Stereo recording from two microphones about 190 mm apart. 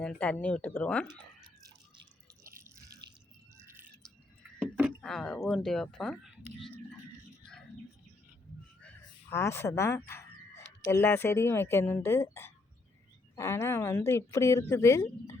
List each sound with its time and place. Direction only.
0.0 s a woman's voice: 5° left (ahead or behind)
2.6 s drip: 15° right (ahead or behind)
4.9 s speech: 5° left (ahead or behind)
9.3 s a woman's voice: 15° left (ahead or behind)